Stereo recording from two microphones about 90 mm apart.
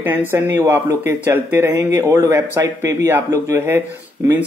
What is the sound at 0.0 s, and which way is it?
Speech, 20° right (ahead or behind).